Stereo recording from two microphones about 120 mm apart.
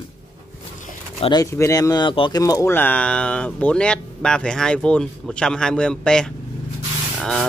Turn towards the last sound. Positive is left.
turn(degrees=0)  # may be behind; listen again after turning